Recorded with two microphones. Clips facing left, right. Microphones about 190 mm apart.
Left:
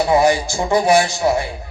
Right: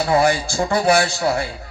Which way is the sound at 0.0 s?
20° left (ahead or behind).